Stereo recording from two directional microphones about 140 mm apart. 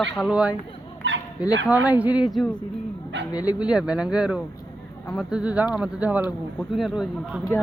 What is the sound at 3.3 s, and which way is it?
Speech, 25° left (ahead or behind).